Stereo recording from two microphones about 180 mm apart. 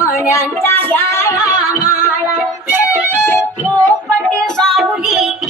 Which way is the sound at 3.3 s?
10° left (ahead or behind).